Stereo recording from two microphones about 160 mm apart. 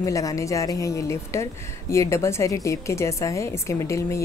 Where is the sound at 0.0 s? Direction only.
20° left (ahead or behind).